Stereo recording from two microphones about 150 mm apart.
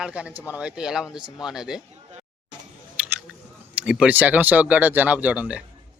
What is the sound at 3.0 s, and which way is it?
Scissors, 10° right (ahead or behind).